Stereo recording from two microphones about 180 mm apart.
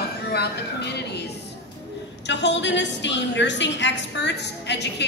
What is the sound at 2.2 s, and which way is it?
A woman's voice, 75° left (ahead or behind).